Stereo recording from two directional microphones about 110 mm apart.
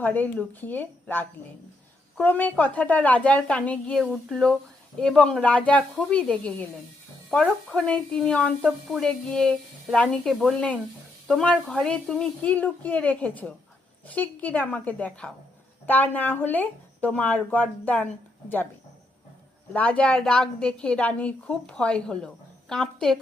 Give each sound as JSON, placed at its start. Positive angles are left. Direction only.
{"t": 0.0, "sound": "speech", "side_deg": 15}
{"t": 7.7, "sound": "speech", "side_deg": 5}
{"t": 19.7, "sound": "speech", "side_deg": 10}